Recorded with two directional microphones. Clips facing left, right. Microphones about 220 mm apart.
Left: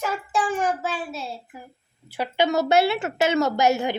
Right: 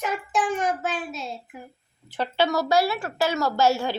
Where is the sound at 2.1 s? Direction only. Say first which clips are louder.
Left 1 dB; 10° left (ahead or behind).